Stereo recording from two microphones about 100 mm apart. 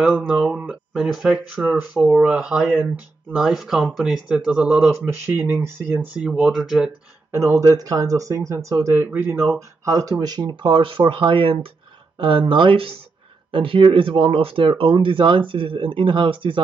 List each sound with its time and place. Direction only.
0.2 s speech: 10° right (ahead or behind)
7.2 s speech: 30° right (ahead or behind)
9.6 s speech: 35° right (ahead or behind); by 16.6 s 55° right (ahead or behind)